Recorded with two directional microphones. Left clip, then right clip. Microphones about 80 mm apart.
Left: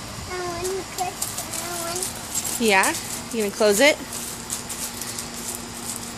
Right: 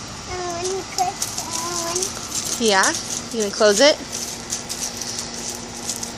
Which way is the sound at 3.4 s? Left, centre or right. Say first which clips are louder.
Right 3 dB; centre.